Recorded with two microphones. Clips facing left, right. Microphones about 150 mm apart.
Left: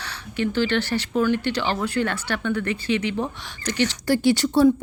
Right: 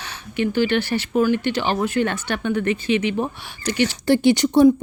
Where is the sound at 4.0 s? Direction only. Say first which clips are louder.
Right 4 dB; 20° right (ahead or behind).